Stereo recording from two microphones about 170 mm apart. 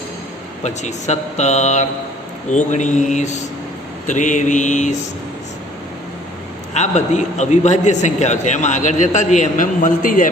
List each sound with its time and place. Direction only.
0.6 s a man's voice: 45° left (ahead or behind)
6.7 s a man's voice: 45° left (ahead or behind)